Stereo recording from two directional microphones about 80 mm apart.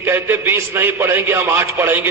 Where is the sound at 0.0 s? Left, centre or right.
Right.